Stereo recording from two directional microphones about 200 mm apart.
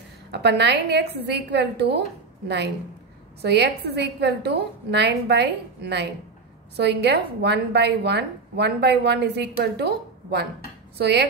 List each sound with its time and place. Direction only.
0.3 s a woman's voice: 55° right (ahead or behind)